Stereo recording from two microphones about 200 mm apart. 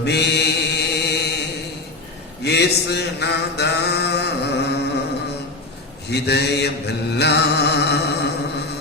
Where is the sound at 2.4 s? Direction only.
55° left (ahead or behind).